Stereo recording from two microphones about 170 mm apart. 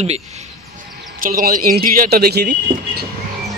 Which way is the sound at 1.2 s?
55° right (ahead or behind).